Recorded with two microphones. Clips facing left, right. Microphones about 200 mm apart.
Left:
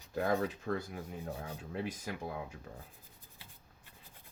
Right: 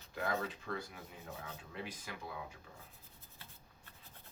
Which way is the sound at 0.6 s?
45° left (ahead or behind).